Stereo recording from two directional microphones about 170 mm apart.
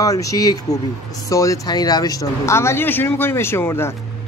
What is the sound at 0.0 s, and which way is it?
Speech, 20° left (ahead or behind).